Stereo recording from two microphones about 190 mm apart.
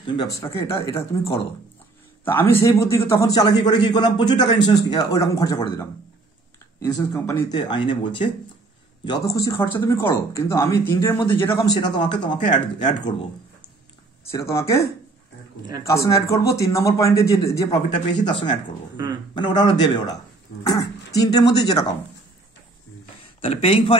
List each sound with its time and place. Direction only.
0.0 s speech: 25° left (ahead or behind)
9.3 s speech: 15° left (ahead or behind)
14.3 s speech: 15° left (ahead or behind)
23.4 s speech: 30° left (ahead or behind)